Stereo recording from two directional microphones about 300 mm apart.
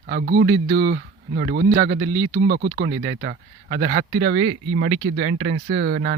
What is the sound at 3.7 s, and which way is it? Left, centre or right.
Speech, right.